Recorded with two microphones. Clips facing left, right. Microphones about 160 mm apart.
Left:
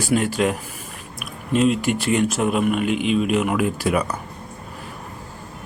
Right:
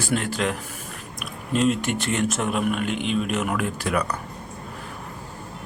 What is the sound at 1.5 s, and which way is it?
Speech, 5° left (ahead or behind).